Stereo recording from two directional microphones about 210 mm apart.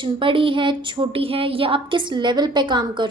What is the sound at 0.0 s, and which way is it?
Speech, 25° right (ahead or behind).